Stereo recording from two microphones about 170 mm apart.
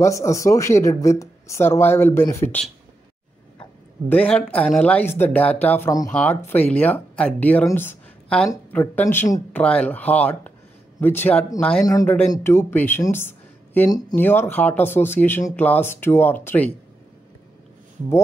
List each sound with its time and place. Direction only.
0.0 s speech: 15° left (ahead or behind)
4.1 s speech: 10° left (ahead or behind)
11.8 s speech: 20° left (ahead or behind)